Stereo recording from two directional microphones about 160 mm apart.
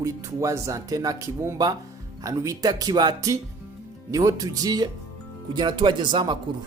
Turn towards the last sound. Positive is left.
turn(degrees=-30)  # may be behind; listen again after turning